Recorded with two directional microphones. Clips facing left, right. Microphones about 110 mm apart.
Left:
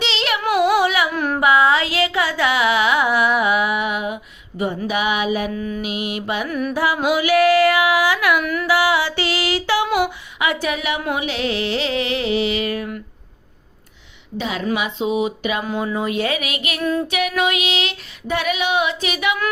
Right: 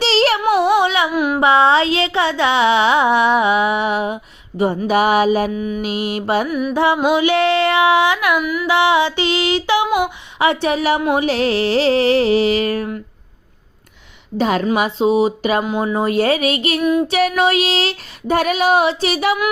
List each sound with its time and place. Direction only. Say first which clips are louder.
0.0 s a sound: right 8 dB; 35° right (ahead or behind)
0.4 s a sound: right 2 dB; 25° right (ahead or behind)
1.1 s a sound: right 4 dB; 10° right (ahead or behind)
1.4 s a sound: right 2 dB; 30° right (ahead or behind)
4.9 s female singing: right 8 dB; 40° right (ahead or behind)
5.5 s music: right 3 dB; 20° right (ahead or behind)
5.8 s female singing: right 4 dB; 35° right (ahead or behind)
6.5 s music: right 3 dB; 10° right (ahead or behind)
6.7 s female singing: right 4 dB; 25° right (ahead or behind)
8.4 s music: right 2 dB; 5° right (ahead or behind)
8.6 s female singing: right 5 dB; 25° right (ahead or behind)
10.3 s female singing: right 7 dB; 30° right (ahead or behind)
14.3 s a woman's voice: right 8 dB; 45° right (ahead or behind)
14.8 s female singing: right 6 dB; 35° right (ahead or behind)